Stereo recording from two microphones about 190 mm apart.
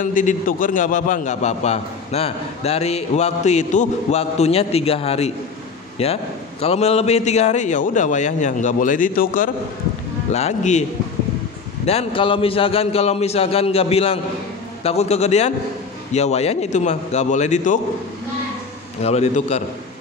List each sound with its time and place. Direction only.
0.0 s a man's voice: 45° left (ahead or behind)
10.3 s a man's voice: 35° left (ahead or behind)
19.0 s a man's voice: 35° left (ahead or behind)